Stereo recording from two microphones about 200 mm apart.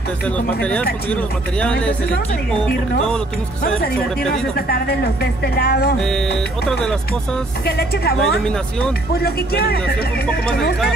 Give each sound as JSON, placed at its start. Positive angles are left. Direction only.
{"t": 0.5, "sound": "speech", "side_deg": 5}
{"t": 4.6, "sound": "speech", "side_deg": 50}
{"t": 5.9, "sound": "speech", "side_deg": 0}
{"t": 7.6, "sound": "speech", "side_deg": 50}
{"t": 8.2, "sound": "speech", "side_deg": 5}
{"t": 9.1, "sound": "speech", "side_deg": 50}